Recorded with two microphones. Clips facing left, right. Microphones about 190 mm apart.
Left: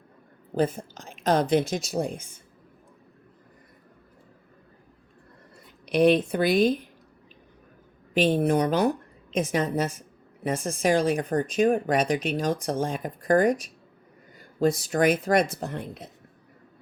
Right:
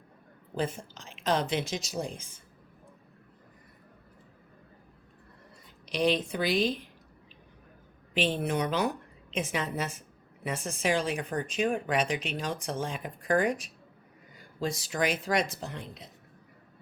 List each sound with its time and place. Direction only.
0.5 s a woman's voice: 45° left (ahead or behind)
5.9 s speech: 55° left (ahead or behind)
8.1 s a woman's voice: 45° left (ahead or behind)